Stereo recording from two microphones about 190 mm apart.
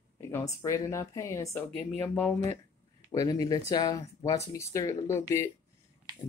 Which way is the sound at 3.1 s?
20° left (ahead or behind).